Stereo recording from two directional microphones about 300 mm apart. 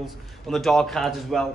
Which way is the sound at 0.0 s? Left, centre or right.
Centre.